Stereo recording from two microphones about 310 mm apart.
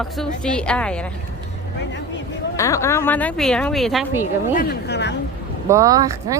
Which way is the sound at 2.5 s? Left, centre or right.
Centre.